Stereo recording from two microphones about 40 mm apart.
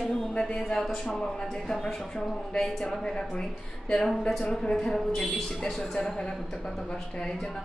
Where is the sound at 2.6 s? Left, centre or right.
Centre.